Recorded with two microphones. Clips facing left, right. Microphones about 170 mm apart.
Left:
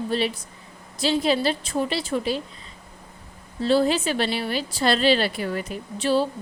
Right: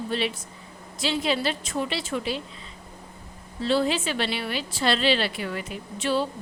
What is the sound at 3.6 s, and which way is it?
A woman's voice, 40° left (ahead or behind).